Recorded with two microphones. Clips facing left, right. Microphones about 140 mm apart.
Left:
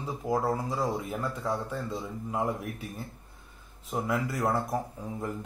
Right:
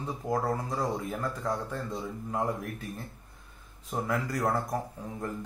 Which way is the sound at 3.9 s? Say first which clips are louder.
Left 1 dB; 5° left (ahead or behind).